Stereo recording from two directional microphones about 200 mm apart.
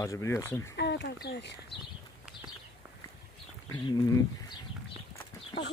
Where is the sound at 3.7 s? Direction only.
20° left (ahead or behind).